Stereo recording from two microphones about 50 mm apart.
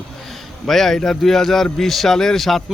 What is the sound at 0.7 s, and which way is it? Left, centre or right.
A man's voice, centre.